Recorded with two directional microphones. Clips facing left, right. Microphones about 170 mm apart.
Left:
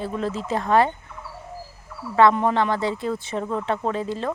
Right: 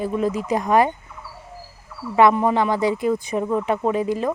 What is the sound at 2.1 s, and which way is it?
Speech, 15° right (ahead or behind).